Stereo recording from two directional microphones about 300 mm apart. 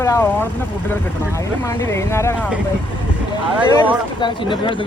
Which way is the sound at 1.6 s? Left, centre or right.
Centre.